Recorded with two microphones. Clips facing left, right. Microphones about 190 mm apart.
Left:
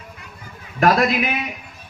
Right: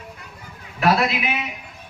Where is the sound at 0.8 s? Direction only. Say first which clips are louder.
Left 3 dB; 45° left (ahead or behind).